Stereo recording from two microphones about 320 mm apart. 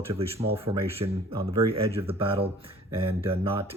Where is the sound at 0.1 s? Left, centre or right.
Centre.